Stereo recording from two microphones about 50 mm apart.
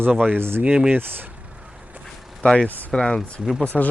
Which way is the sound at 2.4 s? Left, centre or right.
Centre.